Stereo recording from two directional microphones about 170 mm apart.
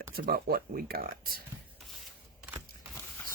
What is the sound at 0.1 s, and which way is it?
Speech, 60° right (ahead or behind).